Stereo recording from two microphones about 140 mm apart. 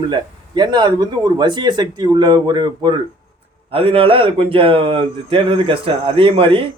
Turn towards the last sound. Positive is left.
turn(degrees=-40)  # may be behind; listen again after turning